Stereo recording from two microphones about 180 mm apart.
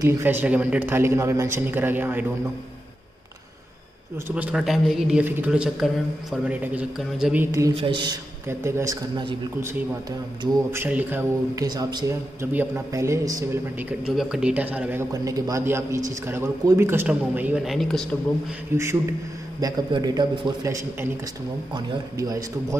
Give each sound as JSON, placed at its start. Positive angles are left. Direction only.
{"t": 0.0, "sound": "a man's voice", "side_deg": -10}
{"t": 4.3, "sound": "a man's voice", "side_deg": -5}
{"t": 7.7, "sound": "a man's voice", "side_deg": -25}
{"t": 8.5, "sound": "a man's voice", "side_deg": -15}
{"t": 10.7, "sound": "a man's voice", "side_deg": -10}
{"t": 11.6, "sound": "a man's voice", "side_deg": -25}
{"t": 18.8, "sound": "a man's voice", "side_deg": -15}